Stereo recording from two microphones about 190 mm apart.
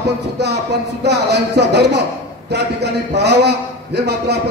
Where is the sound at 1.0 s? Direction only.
60° right (ahead or behind).